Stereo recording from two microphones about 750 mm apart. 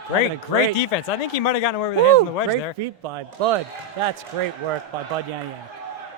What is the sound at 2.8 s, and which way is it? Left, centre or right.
Speech, right.